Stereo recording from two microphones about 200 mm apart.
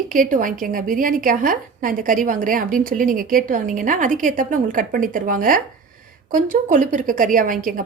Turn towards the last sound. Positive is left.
turn(degrees=-45)  # may be behind; listen again after turning